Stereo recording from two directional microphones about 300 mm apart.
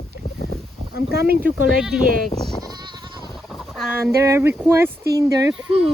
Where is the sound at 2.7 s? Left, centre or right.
Centre.